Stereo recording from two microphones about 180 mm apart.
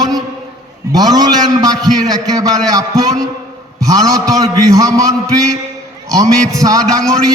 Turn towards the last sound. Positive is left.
turn(degrees=-20)  # may be behind; listen again after turning